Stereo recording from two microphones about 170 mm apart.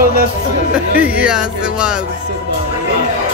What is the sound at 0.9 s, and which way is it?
Speech, 10° right (ahead or behind).